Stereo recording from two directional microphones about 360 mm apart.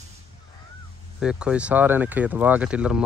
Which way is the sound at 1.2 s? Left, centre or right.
Centre.